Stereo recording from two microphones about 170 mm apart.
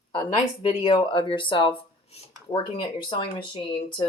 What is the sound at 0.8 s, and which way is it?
Speech, 30° left (ahead or behind).